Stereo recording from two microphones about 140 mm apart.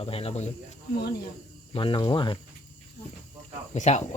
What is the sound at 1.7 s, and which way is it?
Cricket, 40° left (ahead or behind).